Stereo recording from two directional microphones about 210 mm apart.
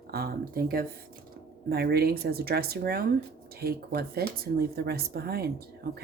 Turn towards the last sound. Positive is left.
turn(degrees=-50)  # may be behind; listen again after turning